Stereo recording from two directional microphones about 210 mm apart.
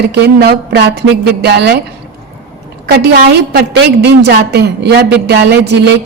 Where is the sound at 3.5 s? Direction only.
50° right (ahead or behind).